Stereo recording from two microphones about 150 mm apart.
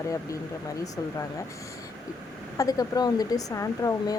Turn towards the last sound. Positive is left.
turn(degrees=20)  # may be behind; listen again after turning